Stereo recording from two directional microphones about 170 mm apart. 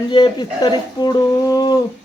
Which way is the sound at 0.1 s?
25° left (ahead or behind).